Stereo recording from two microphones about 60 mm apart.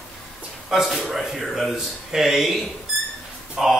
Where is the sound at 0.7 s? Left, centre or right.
Centre.